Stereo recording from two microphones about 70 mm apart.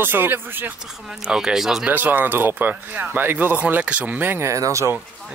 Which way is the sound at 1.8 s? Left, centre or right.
Right.